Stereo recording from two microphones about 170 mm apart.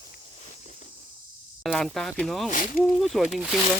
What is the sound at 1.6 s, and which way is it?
Speech, centre (ahead or behind).